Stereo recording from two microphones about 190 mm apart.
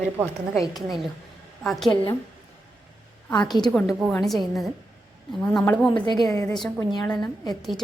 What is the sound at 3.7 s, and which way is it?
A woman's voice, centre (ahead or behind).